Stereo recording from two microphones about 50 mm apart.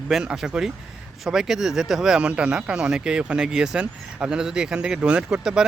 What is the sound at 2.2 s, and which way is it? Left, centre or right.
Speech, right.